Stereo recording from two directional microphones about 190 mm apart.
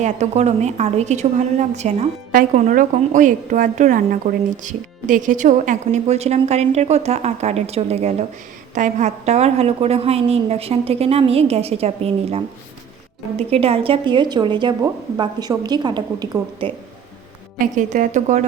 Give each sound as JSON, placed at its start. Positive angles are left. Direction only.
{"t": 0.0, "sound": "a woman's voice", "side_deg": -35}
{"t": 17.6, "sound": "a woman's voice", "side_deg": -40}